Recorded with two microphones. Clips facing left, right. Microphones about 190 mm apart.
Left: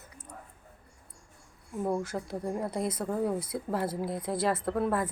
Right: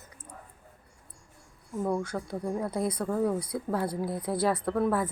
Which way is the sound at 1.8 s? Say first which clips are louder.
Right 1 dB; 5° left (ahead or behind).